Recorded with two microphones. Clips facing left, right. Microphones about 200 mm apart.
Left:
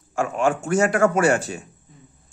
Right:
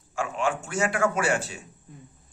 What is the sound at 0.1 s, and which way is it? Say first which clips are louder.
A man's voice: left 6 dB; 45° left (ahead or behind).